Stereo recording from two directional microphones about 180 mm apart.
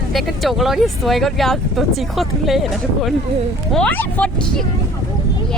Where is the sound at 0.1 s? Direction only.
Centre (ahead or behind).